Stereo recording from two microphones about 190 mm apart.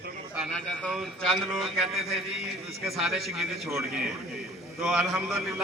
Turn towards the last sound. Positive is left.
turn(degrees=0)  # may be behind; listen again after turning